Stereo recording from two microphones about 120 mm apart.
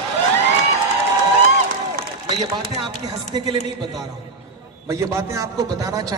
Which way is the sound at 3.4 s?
35° right (ahead or behind).